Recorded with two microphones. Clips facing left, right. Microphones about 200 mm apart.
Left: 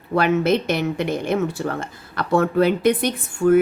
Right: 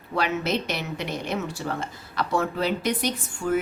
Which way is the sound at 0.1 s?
55° left (ahead or behind).